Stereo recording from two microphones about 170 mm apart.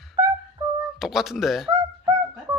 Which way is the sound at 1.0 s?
Centre (ahead or behind).